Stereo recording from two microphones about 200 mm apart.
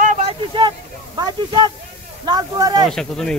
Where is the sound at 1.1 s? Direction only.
20° right (ahead or behind).